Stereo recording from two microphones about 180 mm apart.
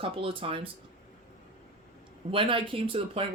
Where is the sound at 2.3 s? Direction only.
30° right (ahead or behind).